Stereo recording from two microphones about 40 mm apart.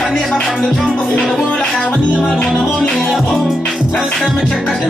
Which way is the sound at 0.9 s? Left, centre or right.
Left.